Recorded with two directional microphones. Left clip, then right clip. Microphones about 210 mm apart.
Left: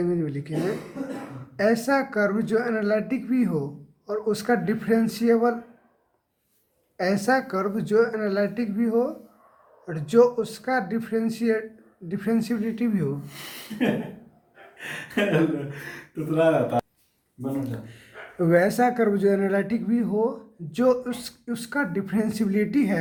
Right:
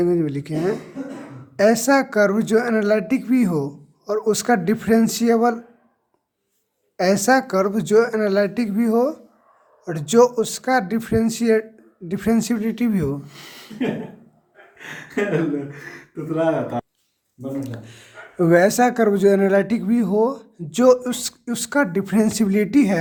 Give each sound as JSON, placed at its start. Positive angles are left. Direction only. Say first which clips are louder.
{"t": 0.0, "sound": "speech", "louder": "right 7 dB", "side_deg": -40}
{"t": 6.9, "sound": "speech", "louder": "right 6 dB", "side_deg": -40}
{"t": 13.2, "sound": "speech", "louder": "left 1 dB", "side_deg": 25}
{"t": 17.6, "sound": "speech", "louder": "right 1 dB", "side_deg": -40}